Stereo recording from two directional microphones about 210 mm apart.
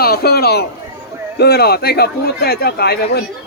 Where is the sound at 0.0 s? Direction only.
45° left (ahead or behind).